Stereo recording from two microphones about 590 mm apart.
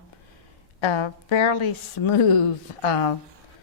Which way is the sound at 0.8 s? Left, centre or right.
Left.